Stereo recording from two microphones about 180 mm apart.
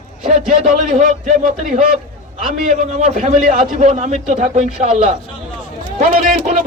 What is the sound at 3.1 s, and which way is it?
A man's voice, 40° right (ahead or behind).